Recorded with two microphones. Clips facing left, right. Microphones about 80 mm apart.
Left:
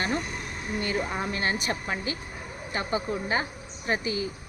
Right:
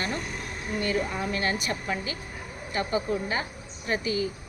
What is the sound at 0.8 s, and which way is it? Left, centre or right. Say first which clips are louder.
Speech: right 1 dB; left.